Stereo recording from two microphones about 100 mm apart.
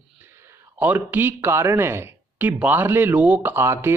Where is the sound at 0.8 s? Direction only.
15° right (ahead or behind).